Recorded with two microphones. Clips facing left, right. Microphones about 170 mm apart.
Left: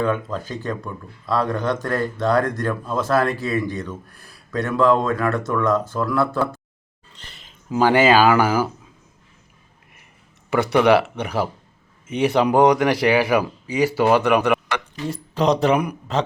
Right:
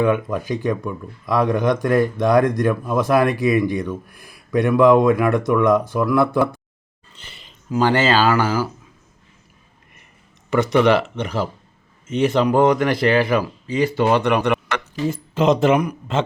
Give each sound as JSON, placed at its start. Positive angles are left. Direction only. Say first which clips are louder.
{"t": 0.0, "sound": "speech", "louder": "right 4 dB", "side_deg": -15}
{"t": 7.1, "sound": "a sound", "louder": "right 1 dB", "side_deg": 0}
{"t": 7.8, "sound": "speech", "louder": "left 2 dB", "side_deg": 10}
{"t": 10.5, "sound": "a man's voice", "louder": "even", "side_deg": 10}